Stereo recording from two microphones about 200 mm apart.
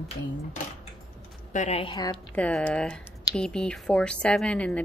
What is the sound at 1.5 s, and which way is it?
Speech, 40° left (ahead or behind).